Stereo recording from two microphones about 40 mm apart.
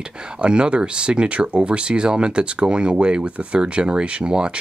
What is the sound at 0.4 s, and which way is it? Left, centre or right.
Speech, right.